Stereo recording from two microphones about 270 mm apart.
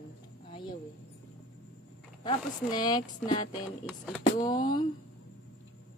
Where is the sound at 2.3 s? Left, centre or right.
Centre.